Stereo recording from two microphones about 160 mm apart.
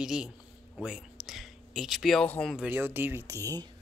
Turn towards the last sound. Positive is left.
turn(degrees=-20)  # may be behind; listen again after turning